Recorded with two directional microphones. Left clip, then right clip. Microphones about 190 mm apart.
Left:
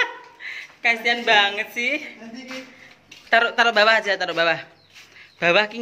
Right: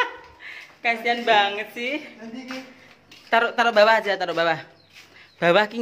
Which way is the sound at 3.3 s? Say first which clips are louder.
Left 2 dB; 10° right (ahead or behind).